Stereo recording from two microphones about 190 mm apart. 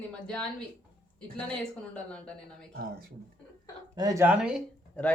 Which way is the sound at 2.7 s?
55° right (ahead or behind).